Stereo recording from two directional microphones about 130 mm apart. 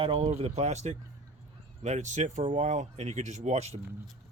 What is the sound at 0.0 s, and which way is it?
Speech, 45° right (ahead or behind).